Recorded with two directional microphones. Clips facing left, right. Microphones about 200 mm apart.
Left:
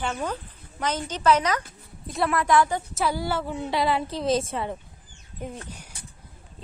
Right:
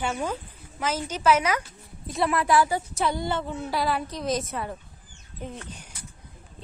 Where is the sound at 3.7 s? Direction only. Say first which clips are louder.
Left 3 dB; 25° left (ahead or behind).